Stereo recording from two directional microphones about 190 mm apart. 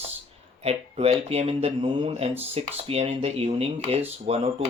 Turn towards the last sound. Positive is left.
turn(degrees=-30)  # may be behind; listen again after turning